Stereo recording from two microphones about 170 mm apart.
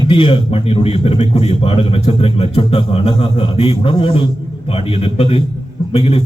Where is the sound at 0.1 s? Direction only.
30° left (ahead or behind).